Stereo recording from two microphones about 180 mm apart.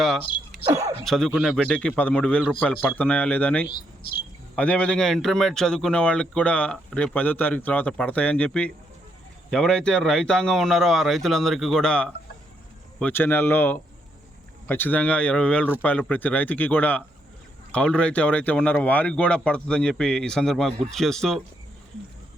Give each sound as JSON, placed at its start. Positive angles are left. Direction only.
{"t": 0.7, "sound": "speech", "side_deg": -20}
{"t": 1.0, "sound": "a man's voice", "side_deg": 5}